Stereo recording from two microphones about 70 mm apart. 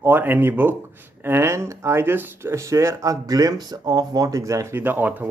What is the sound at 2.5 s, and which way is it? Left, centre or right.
Speech, right.